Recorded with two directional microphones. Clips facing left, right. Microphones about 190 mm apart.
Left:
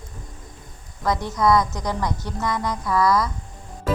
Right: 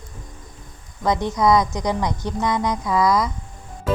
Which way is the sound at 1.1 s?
20° right (ahead or behind).